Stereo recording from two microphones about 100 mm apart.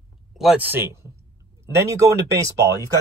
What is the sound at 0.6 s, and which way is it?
Speech, 20° right (ahead or behind).